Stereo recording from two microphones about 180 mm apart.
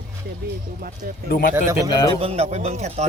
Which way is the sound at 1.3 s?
55° left (ahead or behind).